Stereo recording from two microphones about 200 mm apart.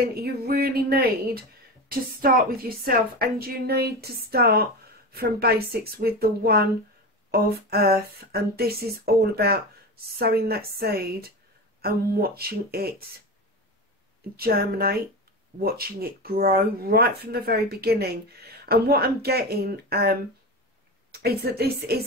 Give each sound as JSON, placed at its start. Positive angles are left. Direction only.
{"t": 0.0, "sound": "a sound", "side_deg": -50}
{"t": 1.9, "sound": "speech", "side_deg": -50}
{"t": 14.3, "sound": "a woman's voice", "side_deg": -50}